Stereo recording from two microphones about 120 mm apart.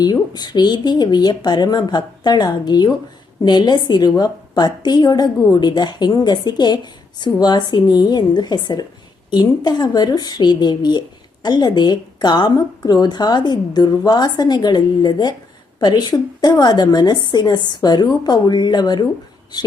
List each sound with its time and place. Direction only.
0.0 s a woman's voice: 35° left (ahead or behind)